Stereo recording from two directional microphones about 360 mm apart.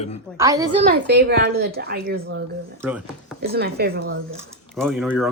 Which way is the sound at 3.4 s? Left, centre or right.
Right.